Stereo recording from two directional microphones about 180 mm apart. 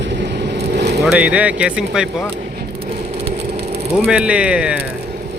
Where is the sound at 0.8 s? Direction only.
65° right (ahead or behind).